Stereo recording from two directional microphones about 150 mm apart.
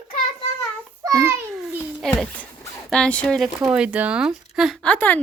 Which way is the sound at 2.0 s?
Centre (ahead or behind).